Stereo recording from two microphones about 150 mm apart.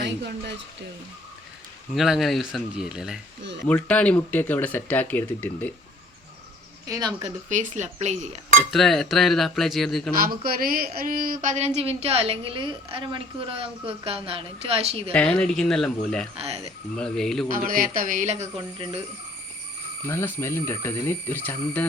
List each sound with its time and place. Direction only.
1.9 s speech: centre (ahead or behind)
3.7 s speech: 10° left (ahead or behind)
6.8 s speech: 25° right (ahead or behind)
7.2 s a woman's voice: 55° right (ahead or behind)
8.7 s speech: centre (ahead or behind)
10.2 s speech: 80° right
11.4 s a woman's voice: 45° right (ahead or behind)
15.1 s speech: 10° left (ahead or behind)
17.5 s speech: 65° right (ahead or behind)
18.5 s a woman's voice: 35° right (ahead or behind)
20.1 s speech: 15° left (ahead or behind)